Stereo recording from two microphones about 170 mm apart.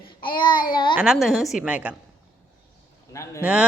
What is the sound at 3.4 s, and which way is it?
Speech, 10° right (ahead or behind).